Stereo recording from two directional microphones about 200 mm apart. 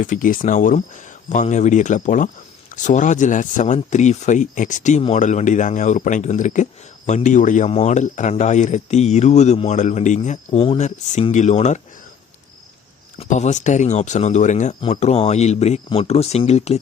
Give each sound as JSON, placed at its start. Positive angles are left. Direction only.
{"t": 0.0, "sound": "speech", "side_deg": 40}
{"t": 13.1, "sound": "speech", "side_deg": 35}